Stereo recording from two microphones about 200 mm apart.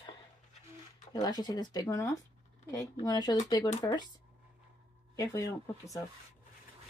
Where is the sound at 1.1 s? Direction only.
20° left (ahead or behind).